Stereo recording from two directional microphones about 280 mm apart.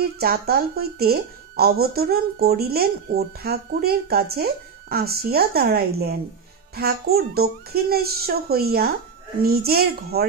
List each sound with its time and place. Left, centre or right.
0.0 s a woman's voice: right